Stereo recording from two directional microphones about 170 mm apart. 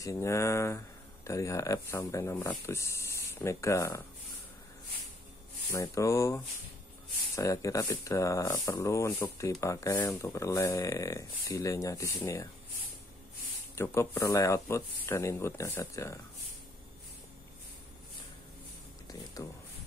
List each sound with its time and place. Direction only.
0.0 s speech: 20° left (ahead or behind)
5.7 s speech: 20° left (ahead or behind)
13.8 s speech: 15° left (ahead or behind)
19.0 s speech: 20° left (ahead or behind)